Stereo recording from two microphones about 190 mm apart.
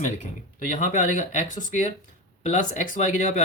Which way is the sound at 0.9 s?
40° left (ahead or behind).